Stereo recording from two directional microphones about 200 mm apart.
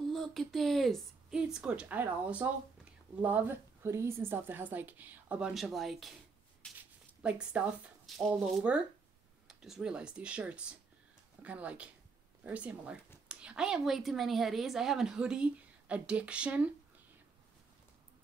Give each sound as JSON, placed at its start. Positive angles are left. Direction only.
{"t": 0.0, "sound": "a woman's voice", "side_deg": 0}
{"t": 7.2, "sound": "a woman's voice", "side_deg": -5}